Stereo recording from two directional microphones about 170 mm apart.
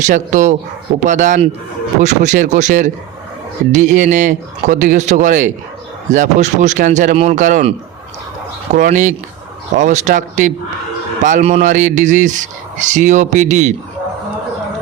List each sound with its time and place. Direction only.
0.0 s speech: 45° right (ahead or behind)
8.7 s speech: 45° right (ahead or behind)